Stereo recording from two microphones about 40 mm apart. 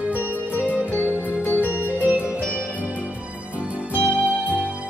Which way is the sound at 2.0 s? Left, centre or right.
Right.